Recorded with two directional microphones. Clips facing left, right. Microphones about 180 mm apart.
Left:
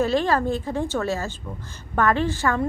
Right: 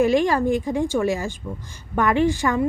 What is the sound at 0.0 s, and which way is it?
A woman's voice, 15° right (ahead or behind).